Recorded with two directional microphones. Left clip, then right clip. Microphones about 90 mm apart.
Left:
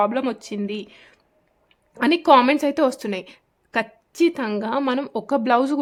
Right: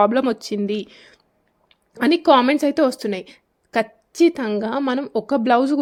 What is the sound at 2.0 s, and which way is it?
A woman's voice, 25° right (ahead or behind).